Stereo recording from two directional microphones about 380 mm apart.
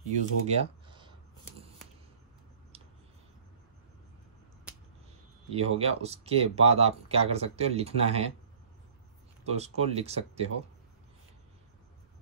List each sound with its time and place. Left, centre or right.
0.2 s speech: centre
5.5 s speech: centre
9.5 s speech: centre